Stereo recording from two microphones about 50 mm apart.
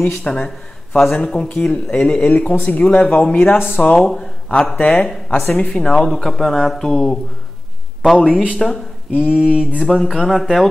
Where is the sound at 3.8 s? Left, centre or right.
Centre.